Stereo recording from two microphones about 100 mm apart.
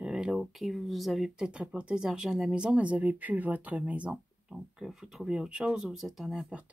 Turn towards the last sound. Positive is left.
turn(degrees=-5)  # may be behind; listen again after turning